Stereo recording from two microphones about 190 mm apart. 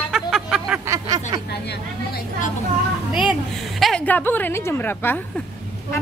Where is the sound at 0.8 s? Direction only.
20° right (ahead or behind).